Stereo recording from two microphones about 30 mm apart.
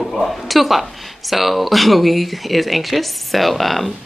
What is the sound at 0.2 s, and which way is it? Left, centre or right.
Speech, centre.